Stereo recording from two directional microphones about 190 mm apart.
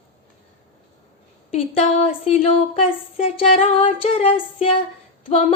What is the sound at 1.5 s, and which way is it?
Speech, 35° left (ahead or behind).